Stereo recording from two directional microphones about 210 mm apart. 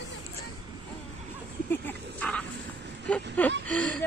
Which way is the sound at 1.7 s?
10° left (ahead or behind).